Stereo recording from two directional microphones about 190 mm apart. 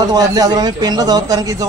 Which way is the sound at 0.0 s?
20° right (ahead or behind).